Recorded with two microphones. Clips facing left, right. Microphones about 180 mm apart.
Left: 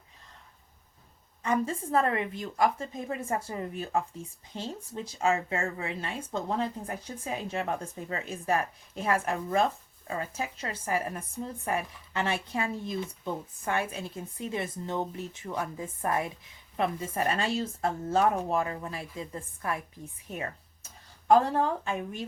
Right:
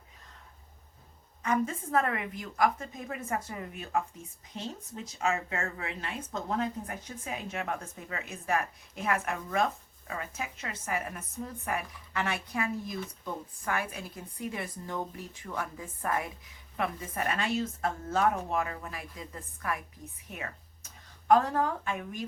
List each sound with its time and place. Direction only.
1.4 s speech: 30° left (ahead or behind)